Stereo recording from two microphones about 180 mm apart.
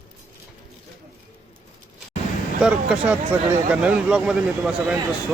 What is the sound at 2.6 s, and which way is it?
Speech, 5° right (ahead or behind).